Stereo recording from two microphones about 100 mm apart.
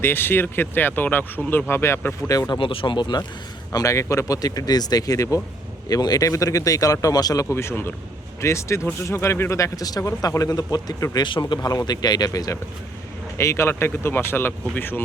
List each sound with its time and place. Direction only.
0.0 s speech: 20° left (ahead or behind)
2.5 s speech: 60° left (ahead or behind)
3.7 s speech: 35° left (ahead or behind)
7.5 s speech: 25° left (ahead or behind)